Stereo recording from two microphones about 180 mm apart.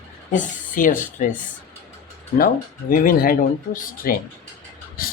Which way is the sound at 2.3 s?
50° left (ahead or behind).